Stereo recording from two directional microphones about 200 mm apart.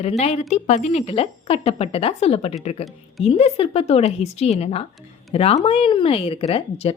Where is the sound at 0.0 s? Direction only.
30° left (ahead or behind).